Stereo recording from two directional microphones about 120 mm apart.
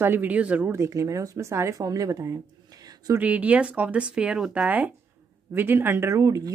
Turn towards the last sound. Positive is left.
turn(degrees=-30)  # may be behind; listen again after turning